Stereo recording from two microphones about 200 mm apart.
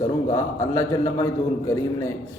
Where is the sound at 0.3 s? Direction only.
15° left (ahead or behind).